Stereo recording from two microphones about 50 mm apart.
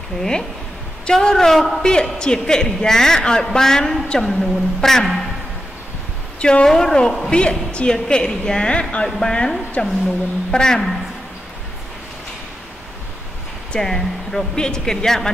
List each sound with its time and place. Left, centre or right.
0.2 s a woman's voice: centre
6.4 s a woman's voice: centre
9.5 s speech: centre
13.7 s speech: centre